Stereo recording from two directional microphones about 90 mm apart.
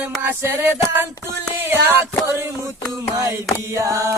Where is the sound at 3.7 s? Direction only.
35° right (ahead or behind).